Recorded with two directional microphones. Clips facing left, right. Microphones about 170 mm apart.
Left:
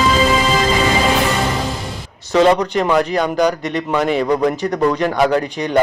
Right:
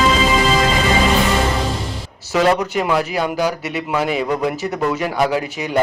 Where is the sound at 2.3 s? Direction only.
5° right (ahead or behind).